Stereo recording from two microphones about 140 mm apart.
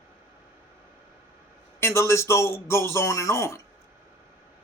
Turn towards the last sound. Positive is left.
turn(degrees=20)  # may be behind; listen again after turning